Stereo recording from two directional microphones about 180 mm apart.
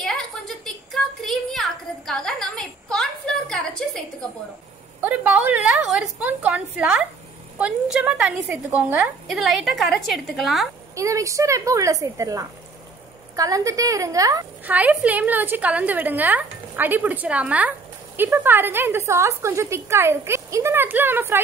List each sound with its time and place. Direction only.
0.9 s a sound: centre (ahead or behind)
5.0 s a woman's voice: 10° right (ahead or behind)
11.0 s a woman's voice: 15° right (ahead or behind)
14.7 s a woman's voice: 10° right (ahead or behind)